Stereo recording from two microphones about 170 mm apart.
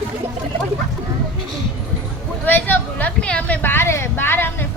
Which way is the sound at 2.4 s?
10° left (ahead or behind).